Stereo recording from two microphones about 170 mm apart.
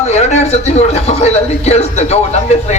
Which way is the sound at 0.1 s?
40° left (ahead or behind).